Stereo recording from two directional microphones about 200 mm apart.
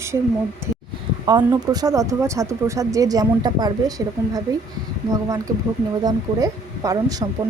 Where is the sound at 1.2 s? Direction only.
20° right (ahead or behind).